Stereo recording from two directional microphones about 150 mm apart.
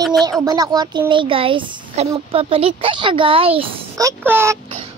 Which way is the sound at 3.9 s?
20° right (ahead or behind).